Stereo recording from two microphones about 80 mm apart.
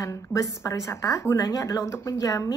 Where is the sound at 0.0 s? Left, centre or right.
Left.